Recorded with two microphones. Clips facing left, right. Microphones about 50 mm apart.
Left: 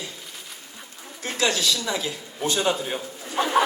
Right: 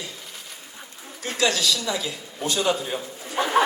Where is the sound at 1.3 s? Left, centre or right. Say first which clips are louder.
Right 1 dB; left.